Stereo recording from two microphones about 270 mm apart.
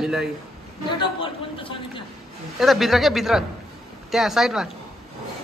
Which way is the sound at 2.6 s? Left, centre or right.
Centre.